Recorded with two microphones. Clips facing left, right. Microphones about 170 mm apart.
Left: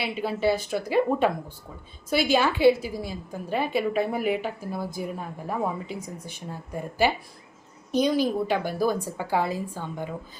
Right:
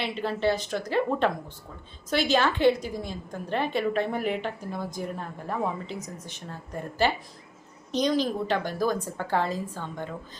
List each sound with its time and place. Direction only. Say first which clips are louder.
0.0 s a woman's voice: left 1 dB; 10° left (ahead or behind)